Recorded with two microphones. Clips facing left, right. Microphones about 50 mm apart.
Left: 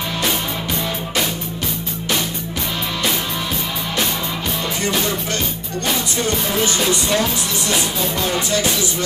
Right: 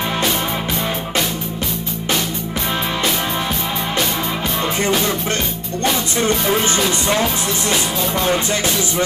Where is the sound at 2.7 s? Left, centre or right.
Right.